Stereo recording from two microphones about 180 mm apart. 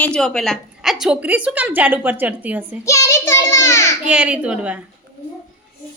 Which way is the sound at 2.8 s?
15° left (ahead or behind).